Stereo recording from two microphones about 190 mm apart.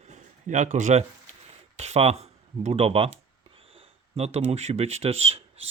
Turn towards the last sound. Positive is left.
turn(degrees=-30)  # may be behind; listen again after turning